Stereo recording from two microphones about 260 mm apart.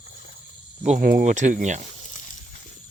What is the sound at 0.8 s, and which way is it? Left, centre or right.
Speech, right.